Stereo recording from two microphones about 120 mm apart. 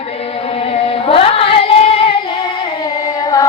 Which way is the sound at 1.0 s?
55° left (ahead or behind).